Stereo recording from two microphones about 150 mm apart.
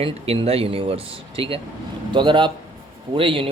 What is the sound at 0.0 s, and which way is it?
Speech, 40° right (ahead or behind).